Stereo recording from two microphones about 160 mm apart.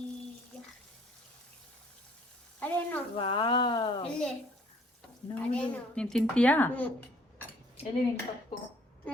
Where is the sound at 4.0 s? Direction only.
5° left (ahead or behind).